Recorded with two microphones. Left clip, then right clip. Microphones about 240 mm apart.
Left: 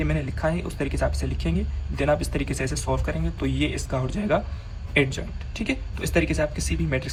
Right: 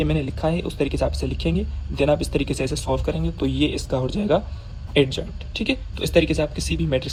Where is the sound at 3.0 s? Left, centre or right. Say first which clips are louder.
Right 4 dB; centre.